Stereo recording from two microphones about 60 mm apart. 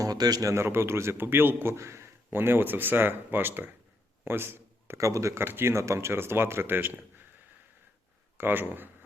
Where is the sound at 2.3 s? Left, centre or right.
Right.